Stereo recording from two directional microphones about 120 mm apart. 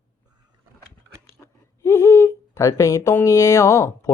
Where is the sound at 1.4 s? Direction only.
20° left (ahead or behind).